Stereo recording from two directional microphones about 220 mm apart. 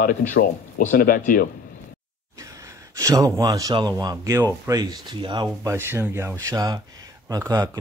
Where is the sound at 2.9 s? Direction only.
15° right (ahead or behind).